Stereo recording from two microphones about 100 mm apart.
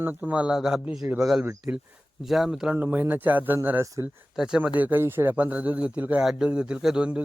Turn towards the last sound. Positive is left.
turn(degrees=-10)  # may be behind; listen again after turning